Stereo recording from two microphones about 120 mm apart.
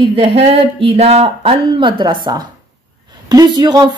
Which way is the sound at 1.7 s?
40° right (ahead or behind).